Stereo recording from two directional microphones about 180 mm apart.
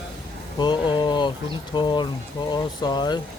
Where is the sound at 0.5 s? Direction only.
25° left (ahead or behind).